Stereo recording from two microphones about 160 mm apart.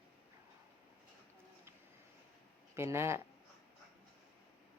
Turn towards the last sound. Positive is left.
turn(degrees=-15)  # may be behind; listen again after turning